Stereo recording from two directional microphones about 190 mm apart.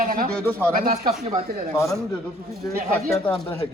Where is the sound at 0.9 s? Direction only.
35° right (ahead or behind).